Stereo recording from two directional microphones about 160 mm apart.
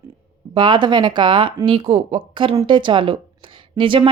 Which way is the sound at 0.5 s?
30° right (ahead or behind).